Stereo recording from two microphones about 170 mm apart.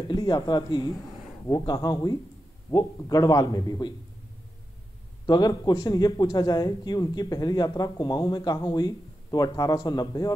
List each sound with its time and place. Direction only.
0.1 s a man's voice: 25° left (ahead or behind)
5.2 s a man's voice: 25° left (ahead or behind)